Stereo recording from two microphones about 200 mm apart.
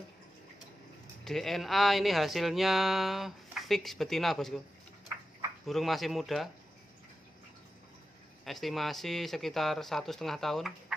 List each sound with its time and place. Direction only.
1.2 s speech: centre (ahead or behind)
5.7 s speech: centre (ahead or behind)
8.5 s speech: centre (ahead or behind)